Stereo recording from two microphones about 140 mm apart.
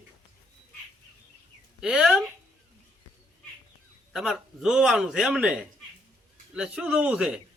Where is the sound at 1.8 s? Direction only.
5° right (ahead or behind).